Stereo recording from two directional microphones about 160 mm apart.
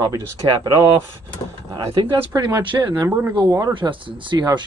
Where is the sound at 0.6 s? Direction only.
20° right (ahead or behind).